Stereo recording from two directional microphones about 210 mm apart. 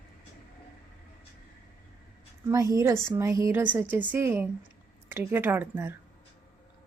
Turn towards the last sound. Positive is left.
turn(degrees=-10)  # may be behind; listen again after turning